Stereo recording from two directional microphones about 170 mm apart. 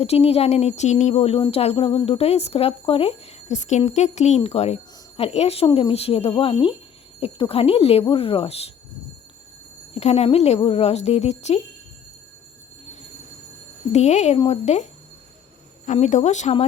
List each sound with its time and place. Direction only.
0.0 s speech: 35° left (ahead or behind)
9.9 s speech: 40° left (ahead or behind)
13.9 s speech: 40° left (ahead or behind)
15.9 s speech: 45° left (ahead or behind)